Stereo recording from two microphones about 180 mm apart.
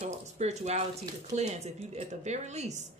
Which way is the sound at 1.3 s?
40° right (ahead or behind).